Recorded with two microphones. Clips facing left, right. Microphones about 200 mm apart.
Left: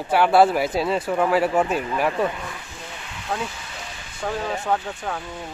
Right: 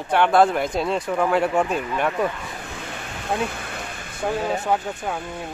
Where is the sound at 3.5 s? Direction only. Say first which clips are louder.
Right 5 dB; 55° right (ahead or behind).